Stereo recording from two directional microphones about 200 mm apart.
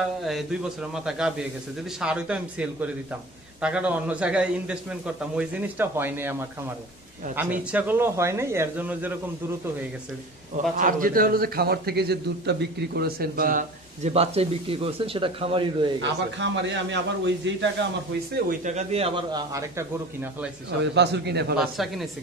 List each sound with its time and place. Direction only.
0.2 s a man's voice: centre (ahead or behind)
7.7 s a man's voice: 10° right (ahead or behind)
10.8 s a man's voice: 45° right (ahead or behind); by 15.9 s 25° right (ahead or behind)
16.0 s a man's voice: 65° right (ahead or behind)
18.3 s speech: 40° right (ahead or behind); by 19.9 s 20° right (ahead or behind)
20.8 s a man's voice: 60° right (ahead or behind)
21.5 s a man's voice: centre (ahead or behind)